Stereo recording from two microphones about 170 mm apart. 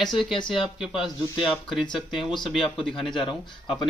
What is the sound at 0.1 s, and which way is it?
Speech, 30° left (ahead or behind).